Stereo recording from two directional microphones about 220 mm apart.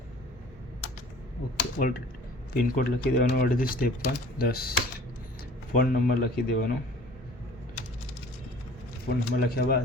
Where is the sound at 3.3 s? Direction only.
40° left (ahead or behind).